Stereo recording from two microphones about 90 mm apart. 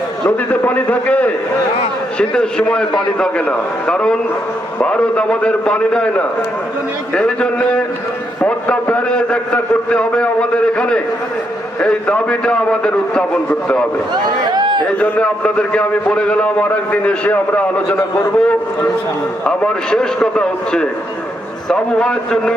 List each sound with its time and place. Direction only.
0.3 s a man's voice: 20° left (ahead or behind)
14.1 s speech: 50° right (ahead or behind)
14.9 s a man's voice: 15° left (ahead or behind)